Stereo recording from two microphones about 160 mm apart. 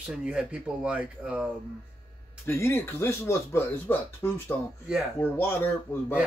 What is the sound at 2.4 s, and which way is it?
Speech, 15° left (ahead or behind).